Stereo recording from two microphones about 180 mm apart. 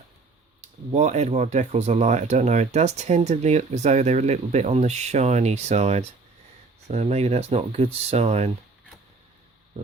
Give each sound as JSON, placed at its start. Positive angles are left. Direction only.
{"t": 0.9, "sound": "speech", "side_deg": -40}